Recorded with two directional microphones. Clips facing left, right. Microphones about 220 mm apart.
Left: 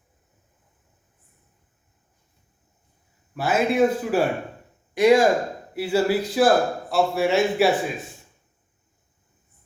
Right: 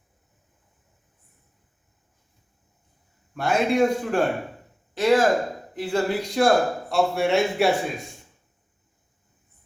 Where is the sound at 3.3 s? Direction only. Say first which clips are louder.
Even; 5° left (ahead or behind).